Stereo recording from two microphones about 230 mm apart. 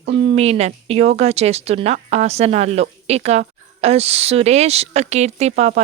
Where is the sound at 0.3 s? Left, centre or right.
Right.